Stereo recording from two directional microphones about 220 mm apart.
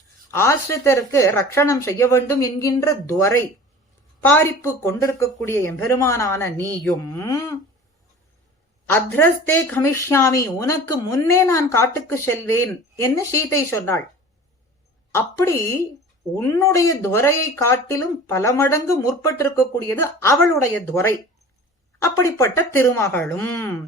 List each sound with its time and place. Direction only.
0.3 s speech: 10° left (ahead or behind)
8.9 s speech: 10° left (ahead or behind)
15.1 s speech: 10° left (ahead or behind)